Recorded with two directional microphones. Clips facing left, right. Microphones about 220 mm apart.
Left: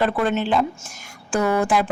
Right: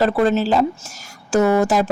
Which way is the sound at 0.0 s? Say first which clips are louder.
Right 4 dB; 40° right (ahead or behind).